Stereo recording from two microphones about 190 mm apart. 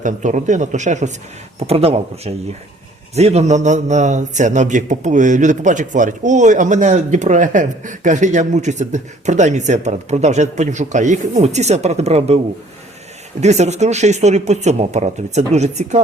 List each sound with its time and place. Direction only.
0.0 s a man's voice: 40° right (ahead or behind)
13.4 s a man's voice: 35° right (ahead or behind)